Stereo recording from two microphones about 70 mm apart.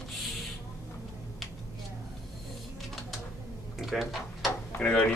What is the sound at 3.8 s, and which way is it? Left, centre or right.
Drawer open or close, centre.